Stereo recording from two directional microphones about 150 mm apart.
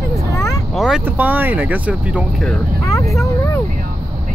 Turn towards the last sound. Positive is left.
turn(degrees=20)  # may be behind; listen again after turning